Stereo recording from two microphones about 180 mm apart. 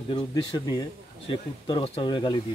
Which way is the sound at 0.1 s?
25° left (ahead or behind).